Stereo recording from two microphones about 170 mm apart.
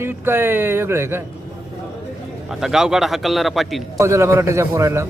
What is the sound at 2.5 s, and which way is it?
Speech, 5° right (ahead or behind).